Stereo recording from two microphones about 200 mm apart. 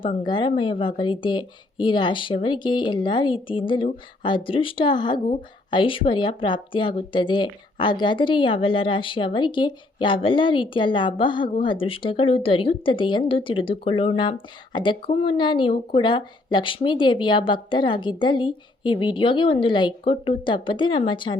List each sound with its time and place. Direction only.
0.0 s a woman's voice: 25° left (ahead or behind)